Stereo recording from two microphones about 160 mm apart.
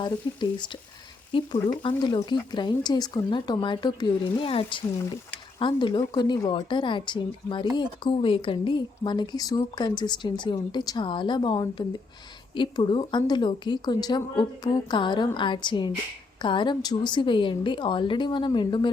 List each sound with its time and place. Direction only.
0.0 s a woman's voice: 30° left (ahead or behind)